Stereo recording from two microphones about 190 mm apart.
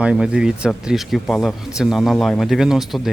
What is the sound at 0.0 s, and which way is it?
Speech, 5° right (ahead or behind).